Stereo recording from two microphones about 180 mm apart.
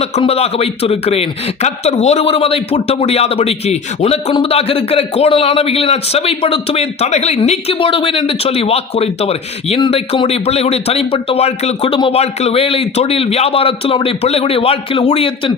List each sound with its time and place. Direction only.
0.0 s speech: 35° left (ahead or behind)